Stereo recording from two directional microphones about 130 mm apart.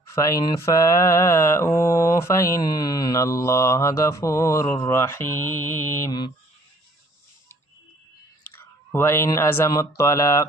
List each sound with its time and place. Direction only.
0.1 s mantra: 25° left (ahead or behind)
8.4 s speech: 20° left (ahead or behind)